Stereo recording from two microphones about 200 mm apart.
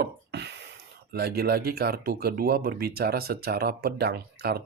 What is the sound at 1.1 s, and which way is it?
Speech, 50° right (ahead or behind).